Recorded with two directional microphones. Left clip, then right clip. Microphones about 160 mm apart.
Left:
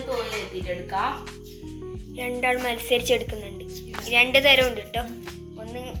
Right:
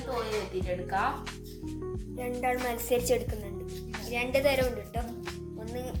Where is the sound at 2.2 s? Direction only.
Centre (ahead or behind).